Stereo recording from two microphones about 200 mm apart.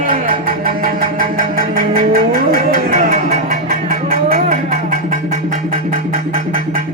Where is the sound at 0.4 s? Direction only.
45° right (ahead or behind).